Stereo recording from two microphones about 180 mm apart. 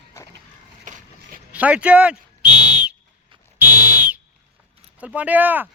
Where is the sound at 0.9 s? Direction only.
45° right (ahead or behind).